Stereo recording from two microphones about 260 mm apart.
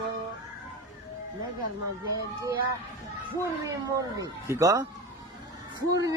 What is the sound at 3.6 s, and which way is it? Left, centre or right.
A man's voice, centre.